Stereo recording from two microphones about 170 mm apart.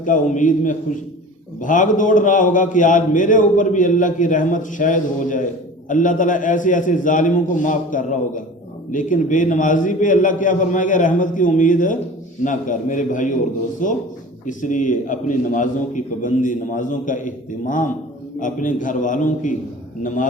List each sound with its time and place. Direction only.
0.0 s a man's voice: 50° left (ahead or behind)
14.4 s a man's voice: 50° left (ahead or behind)